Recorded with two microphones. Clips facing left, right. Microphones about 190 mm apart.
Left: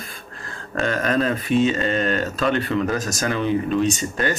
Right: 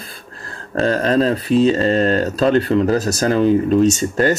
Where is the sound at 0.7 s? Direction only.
35° right (ahead or behind).